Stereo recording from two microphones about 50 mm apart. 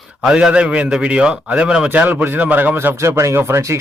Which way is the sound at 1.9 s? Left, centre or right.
Right.